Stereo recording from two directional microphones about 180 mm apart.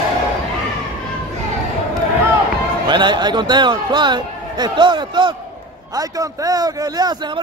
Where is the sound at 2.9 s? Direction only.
25° right (ahead or behind).